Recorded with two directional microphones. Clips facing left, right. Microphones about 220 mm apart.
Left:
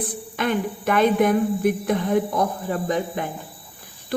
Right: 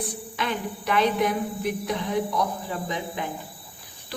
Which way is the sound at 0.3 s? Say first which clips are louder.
Left 6 dB; 50° left (ahead or behind).